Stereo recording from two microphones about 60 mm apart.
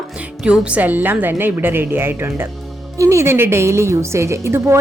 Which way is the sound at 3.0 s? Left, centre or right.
Right.